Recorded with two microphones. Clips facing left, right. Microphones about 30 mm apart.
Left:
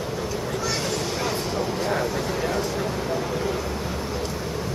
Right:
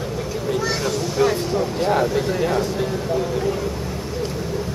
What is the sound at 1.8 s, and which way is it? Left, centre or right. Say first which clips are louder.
Speech: right 6 dB; right.